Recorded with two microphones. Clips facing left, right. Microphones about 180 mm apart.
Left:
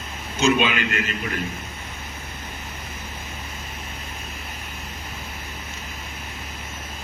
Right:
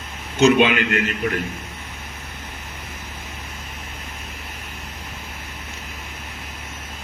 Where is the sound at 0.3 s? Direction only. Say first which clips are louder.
Right 5 dB; 65° right (ahead or behind).